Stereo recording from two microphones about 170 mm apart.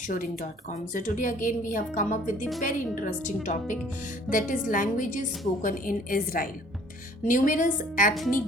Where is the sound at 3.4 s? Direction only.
50° left (ahead or behind).